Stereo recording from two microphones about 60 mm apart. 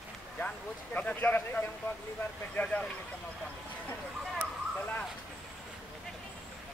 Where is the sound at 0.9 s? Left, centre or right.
Left.